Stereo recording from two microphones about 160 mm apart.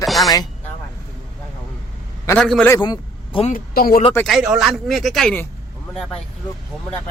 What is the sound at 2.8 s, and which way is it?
Vehicle, 25° left (ahead or behind).